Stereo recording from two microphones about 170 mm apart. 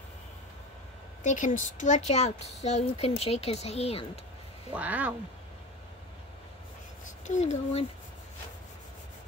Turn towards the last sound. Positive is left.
turn(degrees=35)  # may be behind; listen again after turning